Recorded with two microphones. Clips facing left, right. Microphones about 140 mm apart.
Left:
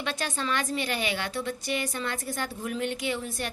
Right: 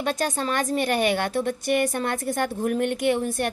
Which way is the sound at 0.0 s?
45° right (ahead or behind).